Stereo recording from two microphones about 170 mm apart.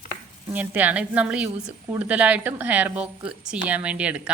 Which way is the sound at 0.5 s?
10° right (ahead or behind).